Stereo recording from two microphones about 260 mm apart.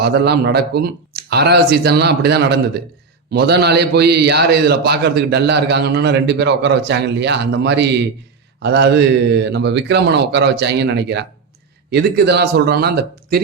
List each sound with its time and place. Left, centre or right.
0.0 s a man's voice: right